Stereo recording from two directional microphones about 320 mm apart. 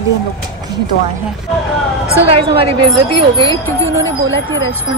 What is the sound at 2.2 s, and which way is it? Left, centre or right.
Speech, centre.